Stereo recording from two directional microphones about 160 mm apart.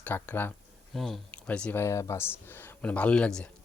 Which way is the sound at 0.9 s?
Centre (ahead or behind).